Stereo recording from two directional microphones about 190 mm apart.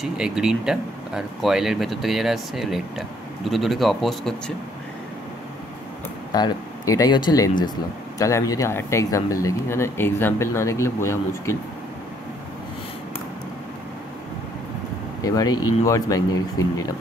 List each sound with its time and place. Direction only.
0.0 s speech: 5° right (ahead or behind)
6.3 s speech: 20° left (ahead or behind)
15.2 s speech: 20° left (ahead or behind)